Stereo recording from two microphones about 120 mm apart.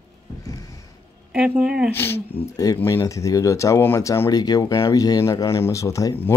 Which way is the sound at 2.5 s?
30° left (ahead or behind).